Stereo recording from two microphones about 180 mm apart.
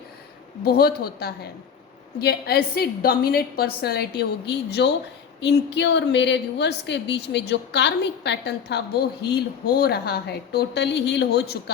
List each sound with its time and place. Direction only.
0.6 s a woman's voice: 60° left (ahead or behind)